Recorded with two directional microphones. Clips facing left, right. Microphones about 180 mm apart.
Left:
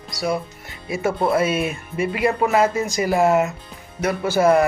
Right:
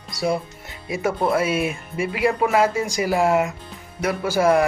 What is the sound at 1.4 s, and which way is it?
Speech, 10° right (ahead or behind).